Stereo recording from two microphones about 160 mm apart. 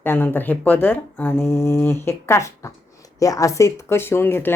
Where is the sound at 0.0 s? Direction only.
10° left (ahead or behind).